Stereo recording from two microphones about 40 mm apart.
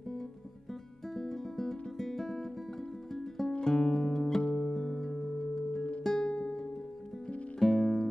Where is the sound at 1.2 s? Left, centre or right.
Centre.